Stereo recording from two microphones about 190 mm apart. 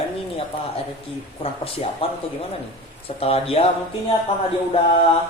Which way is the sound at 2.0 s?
30° left (ahead or behind).